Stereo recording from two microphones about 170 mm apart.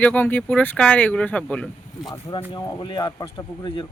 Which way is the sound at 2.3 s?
25° left (ahead or behind).